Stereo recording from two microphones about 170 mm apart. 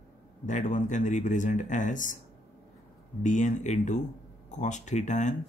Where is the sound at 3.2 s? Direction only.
50° left (ahead or behind).